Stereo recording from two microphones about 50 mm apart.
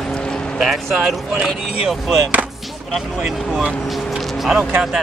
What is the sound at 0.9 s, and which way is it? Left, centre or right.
Speech, centre.